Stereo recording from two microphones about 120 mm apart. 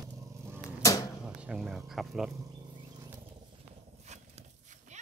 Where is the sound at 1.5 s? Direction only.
5° right (ahead or behind).